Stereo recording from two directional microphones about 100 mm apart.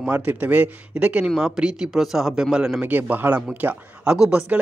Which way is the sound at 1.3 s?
5° right (ahead or behind).